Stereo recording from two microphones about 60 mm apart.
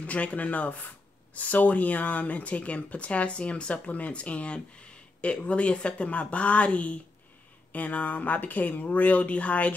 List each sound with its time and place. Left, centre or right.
0.0 s speech: left